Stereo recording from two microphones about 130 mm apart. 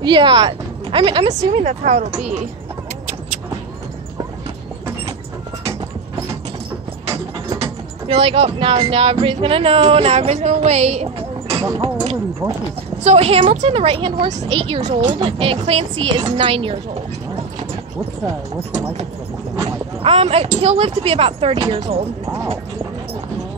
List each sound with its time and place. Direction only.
0.0 s speech: 40° right (ahead or behind)
1.3 s speech: 60° right (ahead or behind)
8.1 s speech: 50° right (ahead or behind)
11.8 s a sound: 45° right (ahead or behind)
13.0 s speech: 50° right (ahead or behind)
14.5 s speech: 45° right (ahead or behind)
14.8 s speech: 65° right (ahead or behind)
15.1 s speech: 45° right (ahead or behind)
20.0 s speech: 50° right (ahead or behind)